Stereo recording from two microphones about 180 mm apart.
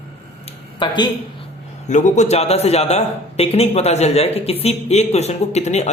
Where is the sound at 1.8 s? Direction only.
40° left (ahead or behind).